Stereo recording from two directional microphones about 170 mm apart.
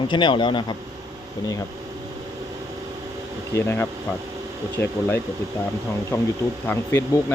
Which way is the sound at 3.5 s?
15° left (ahead or behind).